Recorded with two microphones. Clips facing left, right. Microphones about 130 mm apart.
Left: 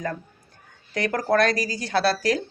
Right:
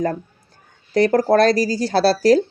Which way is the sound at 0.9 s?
35° right (ahead or behind).